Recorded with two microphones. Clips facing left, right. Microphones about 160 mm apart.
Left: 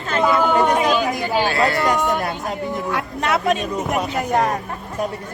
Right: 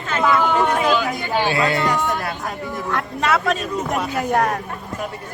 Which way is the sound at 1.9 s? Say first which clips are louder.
Left 2 dB; 15° left (ahead or behind).